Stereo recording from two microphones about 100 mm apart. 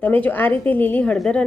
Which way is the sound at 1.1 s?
5° left (ahead or behind).